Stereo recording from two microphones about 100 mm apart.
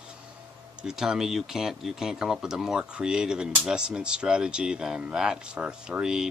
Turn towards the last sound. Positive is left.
turn(degrees=-5)  # may be behind; listen again after turning